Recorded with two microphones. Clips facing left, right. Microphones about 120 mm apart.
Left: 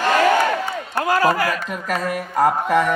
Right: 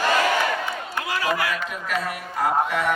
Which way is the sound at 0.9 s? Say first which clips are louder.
Left 8 dB; 45° left (ahead or behind).